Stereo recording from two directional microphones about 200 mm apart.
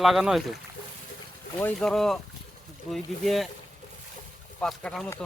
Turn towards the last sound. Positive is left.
turn(degrees=5)  # may be behind; listen again after turning